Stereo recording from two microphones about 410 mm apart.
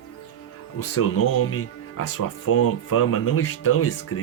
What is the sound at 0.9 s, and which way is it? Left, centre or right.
Speech, left.